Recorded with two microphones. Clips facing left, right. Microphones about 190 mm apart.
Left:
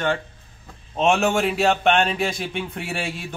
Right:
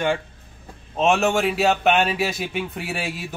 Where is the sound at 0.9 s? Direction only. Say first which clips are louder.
Even; centre (ahead or behind).